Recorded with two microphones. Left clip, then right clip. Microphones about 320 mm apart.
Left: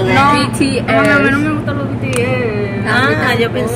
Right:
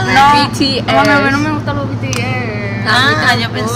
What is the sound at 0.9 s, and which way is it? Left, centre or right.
Speech, right.